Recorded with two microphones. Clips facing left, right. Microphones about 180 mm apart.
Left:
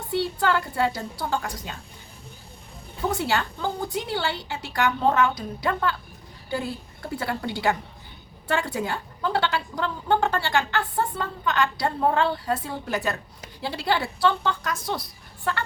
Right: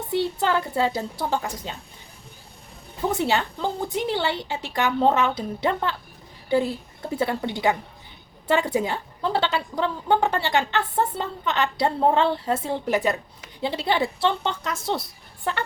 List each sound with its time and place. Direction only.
0.1 s a woman's voice: 20° right (ahead or behind)
3.1 s a woman's voice: 20° right (ahead or behind)
7.1 s a woman's voice: 20° right (ahead or behind)